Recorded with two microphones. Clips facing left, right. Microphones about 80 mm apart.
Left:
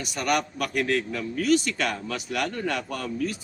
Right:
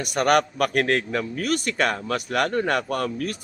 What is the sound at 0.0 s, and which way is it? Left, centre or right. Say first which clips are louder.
A man's voice: right 6 dB; right.